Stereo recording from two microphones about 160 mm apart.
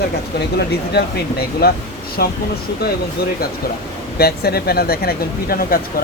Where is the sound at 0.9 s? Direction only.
80° left.